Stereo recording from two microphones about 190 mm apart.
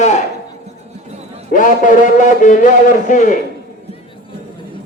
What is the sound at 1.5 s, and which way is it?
A man's voice, 45° left (ahead or behind).